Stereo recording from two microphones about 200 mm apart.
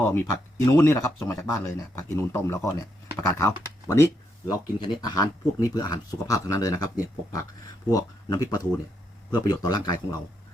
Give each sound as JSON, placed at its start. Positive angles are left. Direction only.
{"t": 0.1, "sound": "speech", "side_deg": 10}